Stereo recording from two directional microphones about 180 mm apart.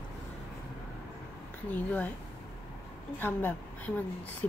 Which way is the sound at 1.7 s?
10° left (ahead or behind).